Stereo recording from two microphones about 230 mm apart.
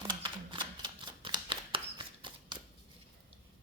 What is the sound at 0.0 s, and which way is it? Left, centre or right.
Shuffling cards, centre.